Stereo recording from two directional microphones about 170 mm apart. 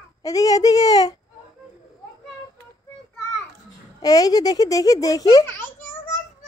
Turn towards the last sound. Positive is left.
turn(degrees=10)  # may be behind; listen again after turning